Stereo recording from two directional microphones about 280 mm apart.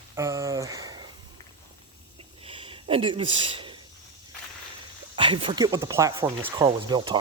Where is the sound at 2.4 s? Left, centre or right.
Centre.